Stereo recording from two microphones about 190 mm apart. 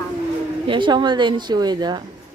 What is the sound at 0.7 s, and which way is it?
Speech, 25° right (ahead or behind).